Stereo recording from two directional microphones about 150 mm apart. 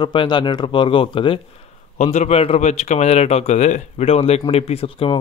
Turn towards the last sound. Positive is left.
turn(degrees=40)  # may be behind; listen again after turning